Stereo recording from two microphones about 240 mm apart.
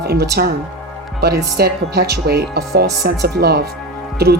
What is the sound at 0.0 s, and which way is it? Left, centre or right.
Speech, right.